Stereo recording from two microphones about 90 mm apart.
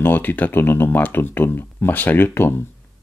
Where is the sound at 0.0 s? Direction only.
20° left (ahead or behind).